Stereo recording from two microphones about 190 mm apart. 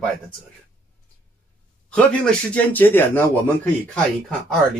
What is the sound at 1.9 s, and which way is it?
Speech, 5° left (ahead or behind).